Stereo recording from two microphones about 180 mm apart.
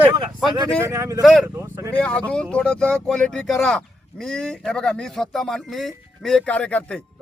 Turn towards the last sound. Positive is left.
turn(degrees=5)  # may be behind; listen again after turning